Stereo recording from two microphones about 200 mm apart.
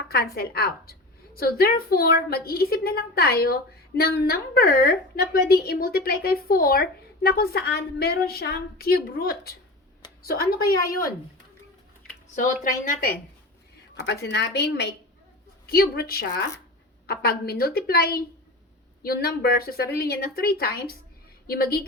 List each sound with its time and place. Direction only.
0.1 s a woman's voice: 50° left (ahead or behind)
14.1 s a woman's voice: 55° left (ahead or behind)